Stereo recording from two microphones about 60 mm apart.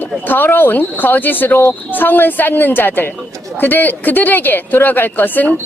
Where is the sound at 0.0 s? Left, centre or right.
Left.